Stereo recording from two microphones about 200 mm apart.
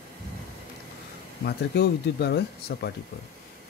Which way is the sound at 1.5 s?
55° left (ahead or behind).